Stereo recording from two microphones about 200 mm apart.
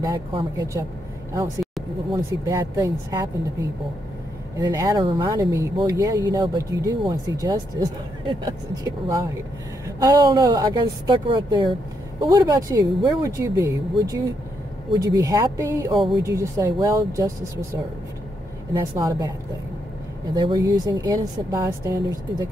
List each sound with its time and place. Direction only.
0.0 s speech: 25° right (ahead or behind)
2.1 s speech: 15° right (ahead or behind)
4.6 s speech: 15° right (ahead or behind)
18.8 s speech: 15° right (ahead or behind)
20.3 s speech: 20° right (ahead or behind)